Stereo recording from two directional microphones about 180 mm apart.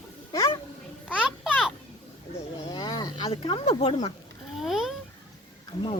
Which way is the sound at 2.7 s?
20° left (ahead or behind).